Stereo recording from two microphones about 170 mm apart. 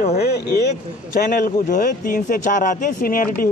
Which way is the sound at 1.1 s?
55° left (ahead or behind).